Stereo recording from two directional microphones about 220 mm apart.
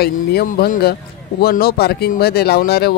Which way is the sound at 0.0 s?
45° left (ahead or behind).